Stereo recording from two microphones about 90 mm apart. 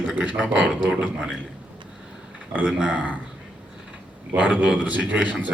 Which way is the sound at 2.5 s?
15° right (ahead or behind).